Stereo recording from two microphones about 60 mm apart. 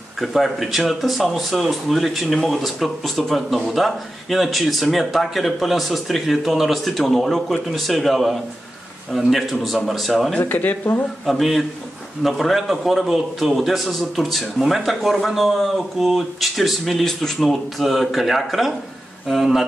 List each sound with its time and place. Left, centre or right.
0.2 s a man's voice: centre
10.4 s speech: left
11.2 s a man's voice: centre